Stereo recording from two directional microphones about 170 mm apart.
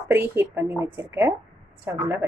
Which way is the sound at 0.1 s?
15° right (ahead or behind).